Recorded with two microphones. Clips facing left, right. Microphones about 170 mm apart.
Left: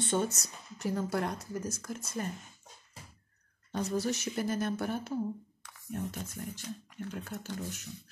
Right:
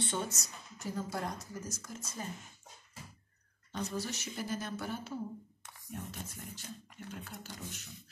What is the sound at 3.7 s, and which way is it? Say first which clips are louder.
Speech: left 6 dB; 45° left (ahead or behind).